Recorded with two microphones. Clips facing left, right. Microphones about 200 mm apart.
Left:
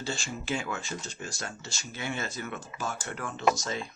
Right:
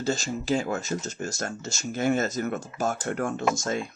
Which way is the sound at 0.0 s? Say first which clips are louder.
Right 8 dB; 40° right (ahead or behind).